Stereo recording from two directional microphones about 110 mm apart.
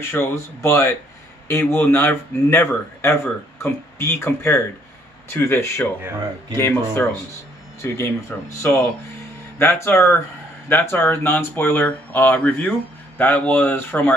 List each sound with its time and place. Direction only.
0.0 s speech: 20° left (ahead or behind)